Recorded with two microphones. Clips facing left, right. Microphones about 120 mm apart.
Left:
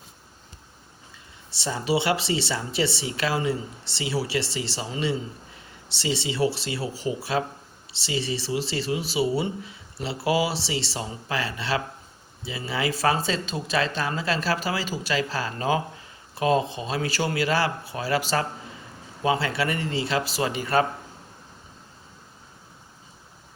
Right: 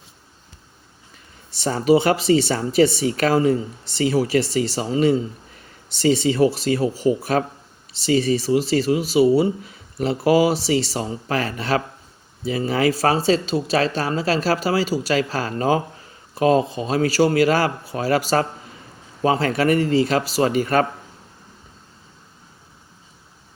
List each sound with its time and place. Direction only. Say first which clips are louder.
1.5 s speech: right 9 dB; 50° right (ahead or behind)